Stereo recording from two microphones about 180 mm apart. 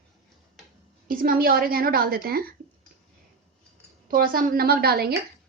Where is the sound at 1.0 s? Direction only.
55° right (ahead or behind).